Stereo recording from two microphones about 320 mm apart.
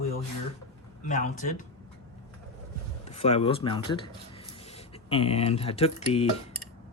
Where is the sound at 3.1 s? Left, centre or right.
Centre.